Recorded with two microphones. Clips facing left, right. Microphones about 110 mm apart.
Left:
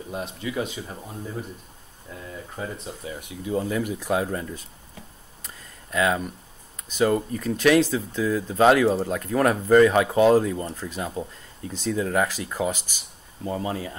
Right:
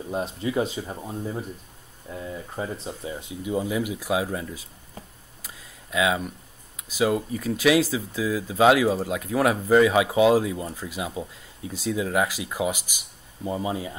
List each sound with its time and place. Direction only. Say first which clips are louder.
0.1 s speech: right 4 dB; 35° right (ahead or behind)
0.8 s speech: right 4 dB; 20° right (ahead or behind)
5.4 s a sound: even; 5° right (ahead or behind)
6.8 s speech: left 2 dB; 5° right (ahead or behind)